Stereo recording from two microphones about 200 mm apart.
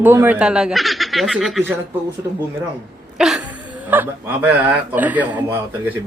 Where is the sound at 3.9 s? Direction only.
10° right (ahead or behind).